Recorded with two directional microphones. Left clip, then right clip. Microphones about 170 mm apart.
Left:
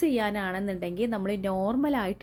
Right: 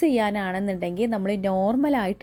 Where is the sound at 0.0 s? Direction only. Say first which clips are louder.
Right 4 dB; 25° right (ahead or behind).